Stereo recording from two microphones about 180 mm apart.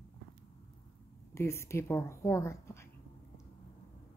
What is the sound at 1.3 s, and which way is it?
A woman's voice, 15° left (ahead or behind).